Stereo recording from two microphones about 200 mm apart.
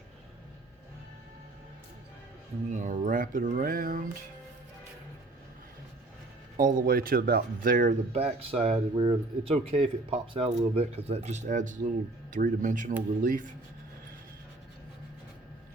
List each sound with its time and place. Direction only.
2.7 s speech: 40° right (ahead or behind)
6.6 s speech: 45° right (ahead or behind)